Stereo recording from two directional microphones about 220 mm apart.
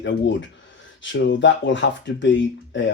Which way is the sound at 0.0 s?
55° left (ahead or behind).